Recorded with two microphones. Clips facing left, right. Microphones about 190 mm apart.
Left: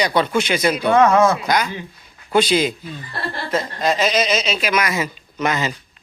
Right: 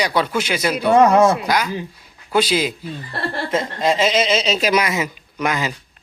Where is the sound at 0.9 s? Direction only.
35° right (ahead or behind).